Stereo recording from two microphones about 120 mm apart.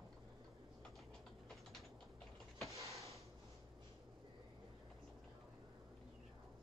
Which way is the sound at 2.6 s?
25° right (ahead or behind).